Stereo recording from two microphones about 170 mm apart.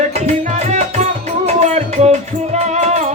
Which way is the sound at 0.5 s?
45° right (ahead or behind).